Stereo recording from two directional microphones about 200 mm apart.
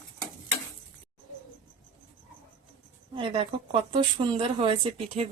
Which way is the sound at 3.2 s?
25° right (ahead or behind).